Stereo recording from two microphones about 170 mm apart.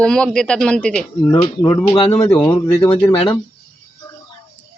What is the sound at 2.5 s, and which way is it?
Speech, 30° left (ahead or behind).